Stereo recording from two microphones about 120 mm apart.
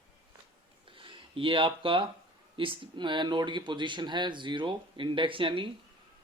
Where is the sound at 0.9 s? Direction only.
45° right (ahead or behind).